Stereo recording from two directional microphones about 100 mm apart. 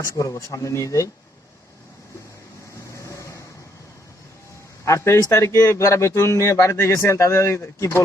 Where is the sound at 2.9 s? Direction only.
30° left (ahead or behind).